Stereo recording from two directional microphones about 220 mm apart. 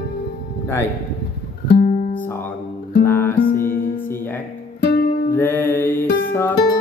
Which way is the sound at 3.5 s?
40° left (ahead or behind).